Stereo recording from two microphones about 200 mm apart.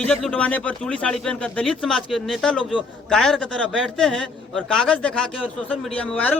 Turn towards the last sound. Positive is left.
turn(degrees=5)  # may be behind; listen again after turning